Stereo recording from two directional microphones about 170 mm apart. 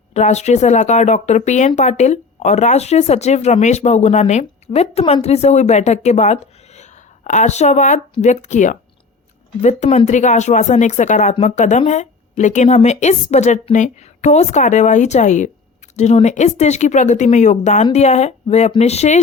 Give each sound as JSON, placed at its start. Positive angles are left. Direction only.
{"t": 0.1, "sound": "speech", "side_deg": 40}